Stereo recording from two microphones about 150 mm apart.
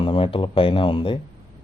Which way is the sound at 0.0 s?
35° left (ahead or behind).